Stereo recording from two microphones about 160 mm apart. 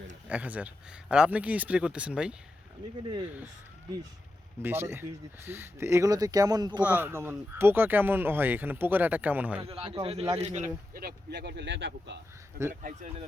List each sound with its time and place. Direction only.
0.3 s speech: 10° right (ahead or behind)
4.6 s speech: 15° right (ahead or behind)
6.8 s speech: 10° right (ahead or behind)
9.6 s a man's voice: 40° right (ahead or behind)
10.9 s speech: 80° right